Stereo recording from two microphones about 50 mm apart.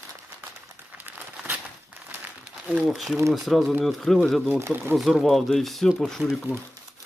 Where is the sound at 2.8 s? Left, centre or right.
Centre.